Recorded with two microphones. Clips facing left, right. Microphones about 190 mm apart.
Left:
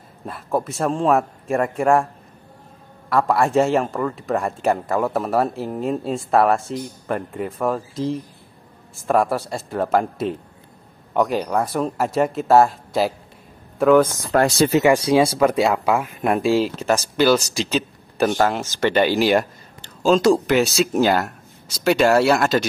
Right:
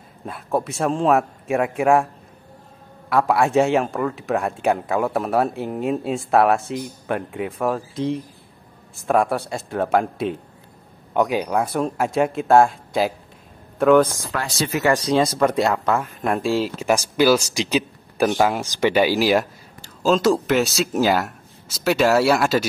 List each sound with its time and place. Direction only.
0.2 s a man's voice: centre (ahead or behind)
3.1 s a man's voice: centre (ahead or behind)
14.3 s speech: 50° left (ahead or behind)
14.9 s speech: 10° left (ahead or behind)
16.8 s a man's voice: 10° right (ahead or behind)